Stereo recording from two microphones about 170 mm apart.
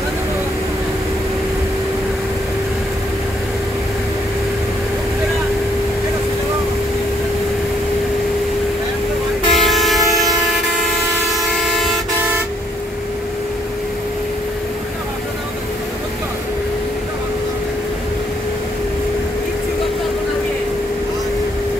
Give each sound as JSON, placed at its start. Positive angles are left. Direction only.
{"t": 9.5, "sound": "train", "side_deg": 0}
{"t": 11.3, "sound": "vehicle", "side_deg": 0}